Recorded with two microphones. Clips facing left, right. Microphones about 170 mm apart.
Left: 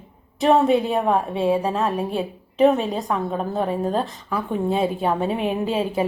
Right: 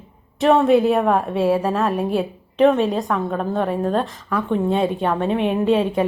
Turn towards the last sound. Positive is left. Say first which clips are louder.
# right 4 dB
turn(degrees=0)  # may be behind; listen again after turning